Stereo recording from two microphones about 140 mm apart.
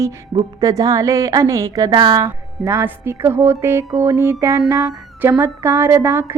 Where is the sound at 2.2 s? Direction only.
20° right (ahead or behind).